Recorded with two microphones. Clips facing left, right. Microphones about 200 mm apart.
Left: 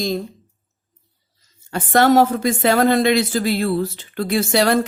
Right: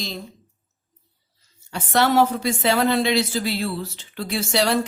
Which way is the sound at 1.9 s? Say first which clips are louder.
Left 4 dB; 50° left (ahead or behind).